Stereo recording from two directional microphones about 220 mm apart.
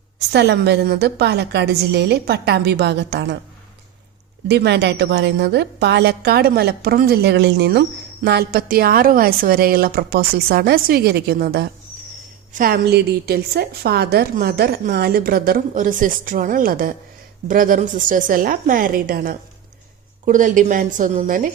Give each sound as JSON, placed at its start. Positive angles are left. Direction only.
{"t": 0.3, "sound": "a woman's voice", "side_deg": -50}
{"t": 4.4, "sound": "a woman's voice", "side_deg": -50}